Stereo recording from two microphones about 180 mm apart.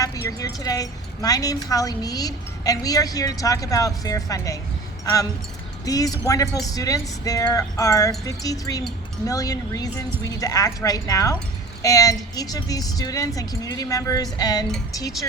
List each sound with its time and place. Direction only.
0.0 s a woman's voice: 20° left (ahead or behind)